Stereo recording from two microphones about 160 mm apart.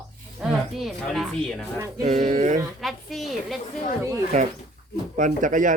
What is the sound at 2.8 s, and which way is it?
Speech, centre (ahead or behind).